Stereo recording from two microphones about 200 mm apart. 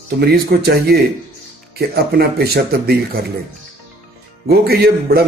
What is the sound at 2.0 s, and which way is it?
Speech, 50° right (ahead or behind).